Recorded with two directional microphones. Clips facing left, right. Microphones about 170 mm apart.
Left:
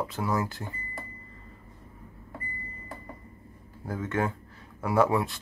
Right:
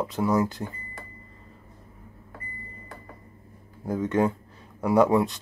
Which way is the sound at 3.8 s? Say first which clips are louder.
Right 6 dB; 15° right (ahead or behind).